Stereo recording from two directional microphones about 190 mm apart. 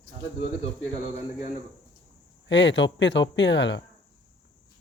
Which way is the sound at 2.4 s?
70° left (ahead or behind).